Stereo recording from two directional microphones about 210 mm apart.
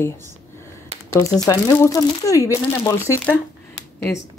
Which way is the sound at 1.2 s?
15° left (ahead or behind).